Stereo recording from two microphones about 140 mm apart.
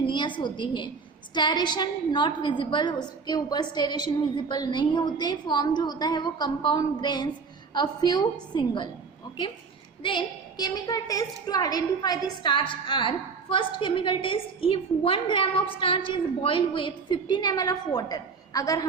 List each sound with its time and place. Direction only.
0.0 s a woman's voice: 35° left (ahead or behind)
10.0 s a woman's voice: 35° left (ahead or behind)